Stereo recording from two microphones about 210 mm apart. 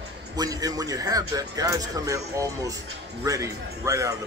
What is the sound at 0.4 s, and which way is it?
A man's voice, 15° right (ahead or behind).